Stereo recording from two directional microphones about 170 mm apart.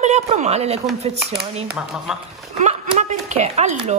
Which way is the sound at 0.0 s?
40° right (ahead or behind).